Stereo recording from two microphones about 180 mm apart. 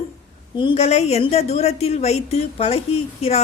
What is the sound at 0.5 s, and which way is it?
A woman's voice, 30° left (ahead or behind).